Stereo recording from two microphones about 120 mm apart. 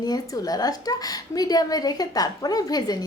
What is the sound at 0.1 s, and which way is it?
A woman's voice, 30° left (ahead or behind).